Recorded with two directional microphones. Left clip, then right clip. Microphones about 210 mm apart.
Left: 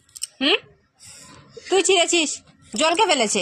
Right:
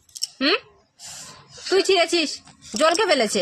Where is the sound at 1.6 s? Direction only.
15° right (ahead or behind).